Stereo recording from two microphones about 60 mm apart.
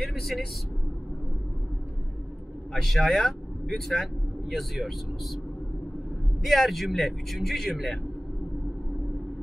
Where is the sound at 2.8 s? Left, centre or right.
Centre.